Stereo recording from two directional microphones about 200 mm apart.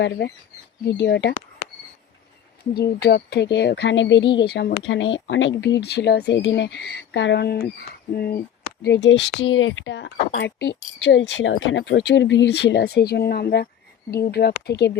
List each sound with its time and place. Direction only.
0.9 s speech: 60° left (ahead or behind)
2.7 s speech: 55° left (ahead or behind)
4.4 s speech: 55° left (ahead or behind)